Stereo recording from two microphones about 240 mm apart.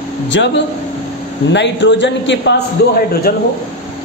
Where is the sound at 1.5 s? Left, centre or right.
Left.